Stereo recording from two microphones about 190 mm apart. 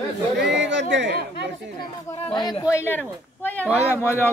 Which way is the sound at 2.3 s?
25° left (ahead or behind).